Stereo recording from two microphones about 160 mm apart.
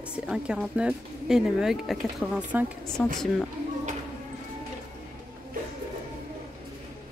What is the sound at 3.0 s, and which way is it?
Speech, 10° left (ahead or behind).